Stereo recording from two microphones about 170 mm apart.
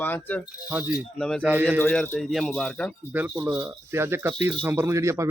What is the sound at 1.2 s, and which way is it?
Speech, 5° left (ahead or behind).